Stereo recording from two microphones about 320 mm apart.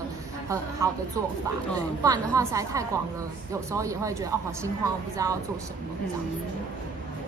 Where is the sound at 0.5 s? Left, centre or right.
Centre.